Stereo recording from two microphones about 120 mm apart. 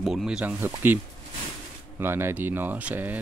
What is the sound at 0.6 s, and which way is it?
Speech, 15° right (ahead or behind).